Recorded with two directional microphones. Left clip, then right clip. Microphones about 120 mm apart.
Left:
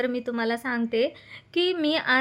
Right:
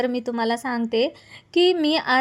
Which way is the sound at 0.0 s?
40° right (ahead or behind).